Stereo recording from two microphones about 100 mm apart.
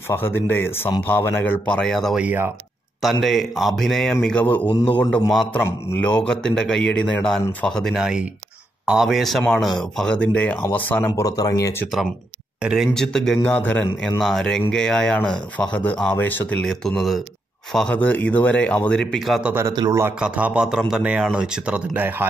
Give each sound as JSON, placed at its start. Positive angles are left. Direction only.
{"t": 0.1, "sound": "speech", "side_deg": 20}
{"t": 1.9, "sound": "a man's voice", "side_deg": 0}
{"t": 2.1, "sound": "speech", "side_deg": -20}
{"t": 3.0, "sound": "a man's voice", "side_deg": 0}
{"t": 5.5, "sound": "a man's voice", "side_deg": 20}
{"t": 11.1, "sound": "speech", "side_deg": 35}
{"t": 12.6, "sound": "a man's voice", "side_deg": -5}
{"t": 13.4, "sound": "speech", "side_deg": 15}
{"t": 14.2, "sound": "a man's voice", "side_deg": 5}
{"t": 16.6, "sound": "a man's voice", "side_deg": 5}
{"t": 17.9, "sound": "speech", "side_deg": 15}
{"t": 19.1, "sound": "a man's voice", "side_deg": 0}
{"t": 19.9, "sound": "speech", "side_deg": -25}
{"t": 20.2, "sound": "speech", "side_deg": -10}